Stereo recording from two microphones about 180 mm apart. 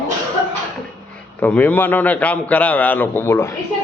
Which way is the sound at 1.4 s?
10° left (ahead or behind).